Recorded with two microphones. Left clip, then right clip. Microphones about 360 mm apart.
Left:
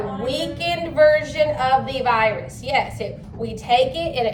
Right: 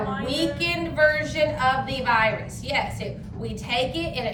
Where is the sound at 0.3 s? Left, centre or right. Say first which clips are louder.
Left 2 dB; centre.